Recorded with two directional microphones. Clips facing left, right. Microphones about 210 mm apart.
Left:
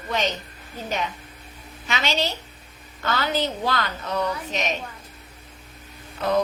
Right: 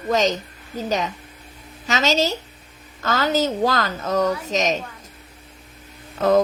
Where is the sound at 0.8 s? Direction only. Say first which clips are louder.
Right 5 dB; 40° right (ahead or behind).